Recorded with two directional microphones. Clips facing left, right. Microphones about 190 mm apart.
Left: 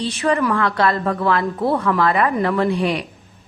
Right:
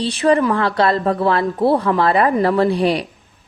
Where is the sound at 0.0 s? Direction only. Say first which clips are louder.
Right 4 dB; 30° right (ahead or behind).